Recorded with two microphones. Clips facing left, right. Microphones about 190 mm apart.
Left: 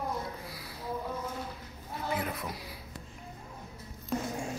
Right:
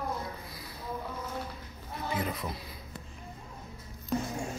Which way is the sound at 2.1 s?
5° left (ahead or behind).